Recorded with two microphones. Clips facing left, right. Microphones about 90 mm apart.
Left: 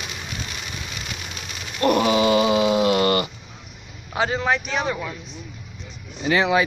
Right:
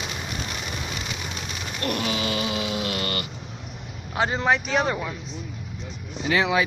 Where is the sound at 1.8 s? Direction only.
30° left (ahead or behind).